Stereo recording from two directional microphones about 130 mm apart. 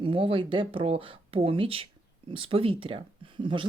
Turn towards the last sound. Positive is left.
turn(degrees=-40)  # may be behind; listen again after turning